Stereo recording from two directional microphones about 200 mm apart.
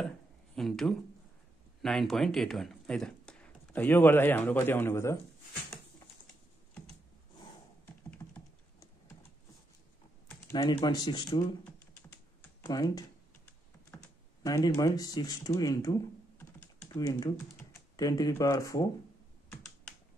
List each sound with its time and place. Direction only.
0.6 s speech: centre (ahead or behind)
7.8 s computer keyboard: 10° left (ahead or behind)
10.5 s speech: 20° left (ahead or behind)
12.4 s computer keyboard: 20° left (ahead or behind)
14.4 s speech: 20° left (ahead or behind)